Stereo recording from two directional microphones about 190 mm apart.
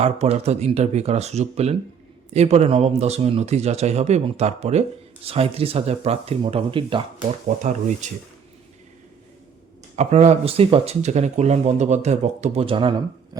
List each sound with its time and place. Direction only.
0.0 s speech: 35° right (ahead or behind)
7.4 s speech: 40° right (ahead or behind)
9.9 s speech: 35° right (ahead or behind)